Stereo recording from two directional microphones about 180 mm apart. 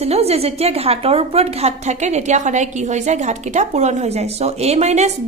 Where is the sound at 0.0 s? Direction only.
35° right (ahead or behind).